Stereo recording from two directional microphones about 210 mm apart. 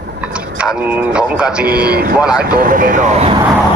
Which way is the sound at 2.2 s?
5° right (ahead or behind).